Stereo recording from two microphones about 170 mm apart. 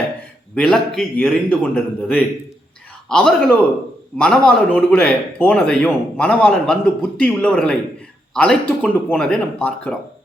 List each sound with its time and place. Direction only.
0.5 s a man's voice: 5° left (ahead or behind)